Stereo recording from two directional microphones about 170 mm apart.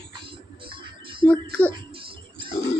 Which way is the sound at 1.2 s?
10° left (ahead or behind).